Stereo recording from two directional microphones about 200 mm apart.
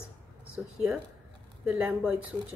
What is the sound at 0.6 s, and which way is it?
A woman's voice, centre (ahead or behind).